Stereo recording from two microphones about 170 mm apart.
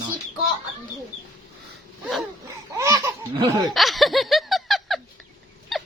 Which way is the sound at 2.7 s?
15° right (ahead or behind).